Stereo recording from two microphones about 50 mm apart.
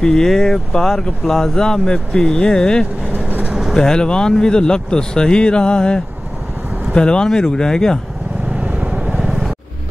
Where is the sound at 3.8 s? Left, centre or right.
Centre.